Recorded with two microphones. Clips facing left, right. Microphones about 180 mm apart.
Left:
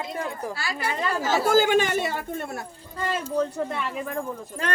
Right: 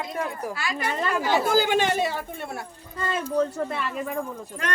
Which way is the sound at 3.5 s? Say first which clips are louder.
Even; 5° right (ahead or behind).